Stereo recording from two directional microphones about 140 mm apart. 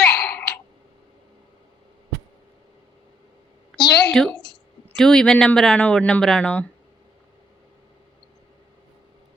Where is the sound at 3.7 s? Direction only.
Centre (ahead or behind).